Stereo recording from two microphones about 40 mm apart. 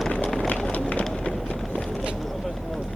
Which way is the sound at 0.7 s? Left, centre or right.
Left.